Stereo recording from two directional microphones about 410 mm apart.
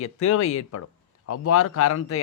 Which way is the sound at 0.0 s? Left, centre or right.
Left.